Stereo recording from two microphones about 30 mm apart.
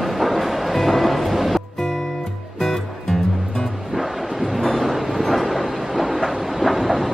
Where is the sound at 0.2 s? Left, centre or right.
Centre.